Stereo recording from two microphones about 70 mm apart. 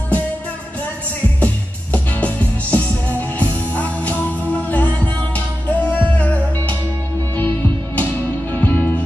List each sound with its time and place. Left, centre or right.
1.4 s music: centre